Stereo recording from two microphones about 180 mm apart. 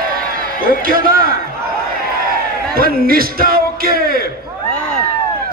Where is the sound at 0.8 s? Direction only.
55° right (ahead or behind).